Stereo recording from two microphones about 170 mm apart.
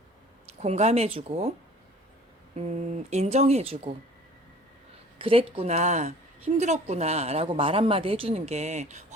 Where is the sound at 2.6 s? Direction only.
40° right (ahead or behind).